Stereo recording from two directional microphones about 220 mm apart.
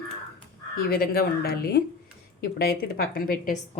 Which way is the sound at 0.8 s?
45° left (ahead or behind).